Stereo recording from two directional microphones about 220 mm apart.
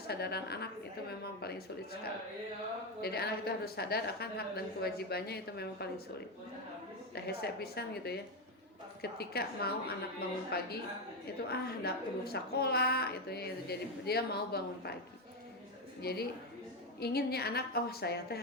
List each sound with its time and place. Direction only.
0.1 s a woman's voice: 45° left (ahead or behind)
3.0 s a woman's voice: 45° left (ahead or behind)
7.3 s a woman's voice: 45° left (ahead or behind)
16.0 s a woman's voice: 45° left (ahead or behind)